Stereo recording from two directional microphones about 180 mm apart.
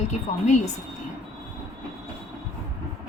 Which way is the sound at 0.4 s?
40° left (ahead or behind).